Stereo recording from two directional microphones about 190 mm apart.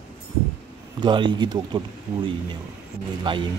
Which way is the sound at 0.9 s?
25° right (ahead or behind).